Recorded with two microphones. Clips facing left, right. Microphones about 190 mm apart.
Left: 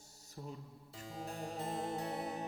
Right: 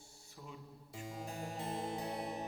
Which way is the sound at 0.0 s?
40° left (ahead or behind).